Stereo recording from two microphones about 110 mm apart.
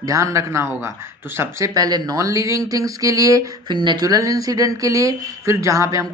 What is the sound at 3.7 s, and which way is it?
A woman's voice, 40° right (ahead or behind).